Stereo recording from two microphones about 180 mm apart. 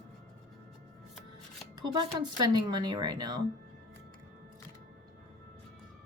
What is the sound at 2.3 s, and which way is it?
A woman's voice, 25° right (ahead or behind).